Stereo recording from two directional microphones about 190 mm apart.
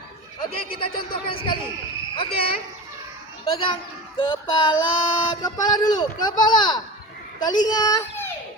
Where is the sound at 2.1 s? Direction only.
30° left (ahead or behind).